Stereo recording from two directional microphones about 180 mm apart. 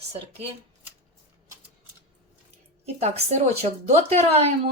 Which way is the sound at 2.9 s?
35° right (ahead or behind).